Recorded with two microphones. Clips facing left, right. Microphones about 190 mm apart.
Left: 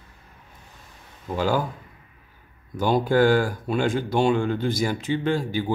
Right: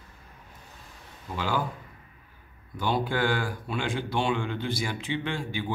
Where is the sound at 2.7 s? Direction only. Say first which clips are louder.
Left 8 dB; 45° left (ahead or behind).